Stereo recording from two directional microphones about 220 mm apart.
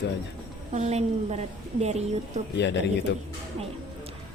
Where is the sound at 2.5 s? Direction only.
50° left (ahead or behind).